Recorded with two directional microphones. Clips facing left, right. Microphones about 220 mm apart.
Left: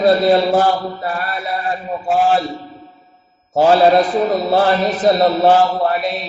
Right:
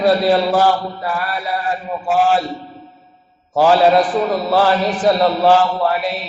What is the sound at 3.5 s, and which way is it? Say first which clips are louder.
A man's voice: left 1 dB; 25° left (ahead or behind).